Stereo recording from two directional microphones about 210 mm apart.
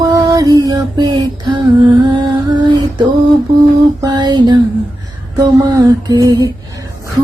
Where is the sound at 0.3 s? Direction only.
15° right (ahead or behind).